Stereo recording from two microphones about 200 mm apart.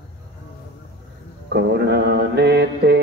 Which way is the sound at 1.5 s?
60° right (ahead or behind).